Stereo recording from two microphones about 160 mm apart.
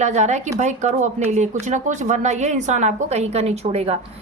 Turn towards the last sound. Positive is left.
turn(degrees=-40)  # may be behind; listen again after turning